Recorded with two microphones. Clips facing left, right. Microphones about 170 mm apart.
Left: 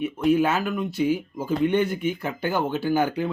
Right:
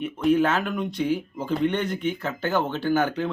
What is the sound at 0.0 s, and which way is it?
Speech, 10° left (ahead or behind).